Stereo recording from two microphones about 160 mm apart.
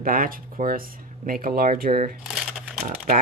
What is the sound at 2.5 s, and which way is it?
Crumpling, 5° right (ahead or behind).